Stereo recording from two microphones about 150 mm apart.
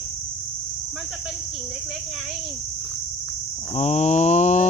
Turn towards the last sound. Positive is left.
turn(degrees=50)  # may be behind; listen again after turning